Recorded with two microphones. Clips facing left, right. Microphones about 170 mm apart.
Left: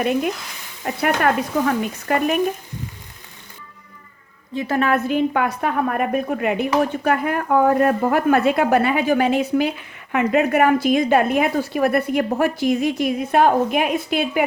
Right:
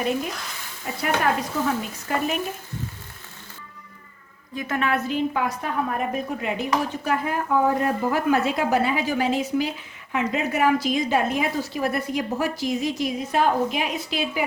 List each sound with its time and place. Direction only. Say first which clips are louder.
1.0 s speech: left 4 dB; 65° left (ahead or behind)
4.5 s a woman's voice: left 5 dB; 35° left (ahead or behind)
5.0 s speech: left 5 dB; 60° left (ahead or behind)